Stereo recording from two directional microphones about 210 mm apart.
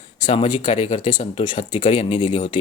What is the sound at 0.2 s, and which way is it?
Speech, 20° left (ahead or behind).